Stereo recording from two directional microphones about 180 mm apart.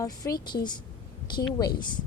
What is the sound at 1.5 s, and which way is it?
Speech, 20° left (ahead or behind).